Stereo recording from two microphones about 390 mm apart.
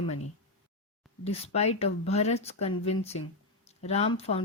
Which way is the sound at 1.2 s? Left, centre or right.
Centre.